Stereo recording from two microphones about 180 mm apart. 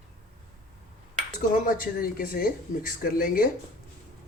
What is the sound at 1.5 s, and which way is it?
Speech, 50° left (ahead or behind).